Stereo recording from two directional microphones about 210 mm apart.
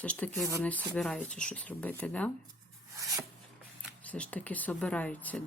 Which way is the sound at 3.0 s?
15° right (ahead or behind).